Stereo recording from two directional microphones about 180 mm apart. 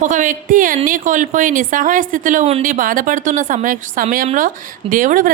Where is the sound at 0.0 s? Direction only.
45° right (ahead or behind).